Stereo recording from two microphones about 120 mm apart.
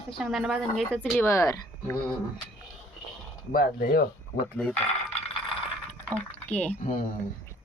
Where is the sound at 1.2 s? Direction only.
25° left (ahead or behind).